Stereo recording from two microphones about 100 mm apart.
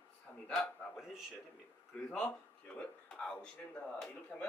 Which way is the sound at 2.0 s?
10° left (ahead or behind).